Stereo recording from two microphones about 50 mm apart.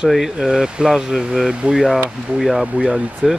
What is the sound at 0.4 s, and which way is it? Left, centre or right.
Speech, centre.